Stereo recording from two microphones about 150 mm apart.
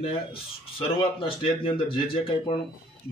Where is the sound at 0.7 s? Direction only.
35° left (ahead or behind).